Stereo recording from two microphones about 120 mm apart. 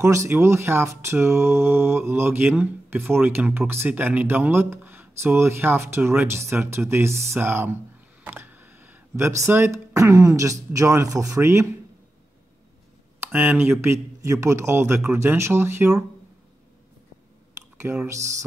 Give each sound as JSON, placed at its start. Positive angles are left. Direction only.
{"t": 0.0, "sound": "speech", "side_deg": -25}
{"t": 13.2, "sound": "speech", "side_deg": -15}
{"t": 18.0, "sound": "speech", "side_deg": -25}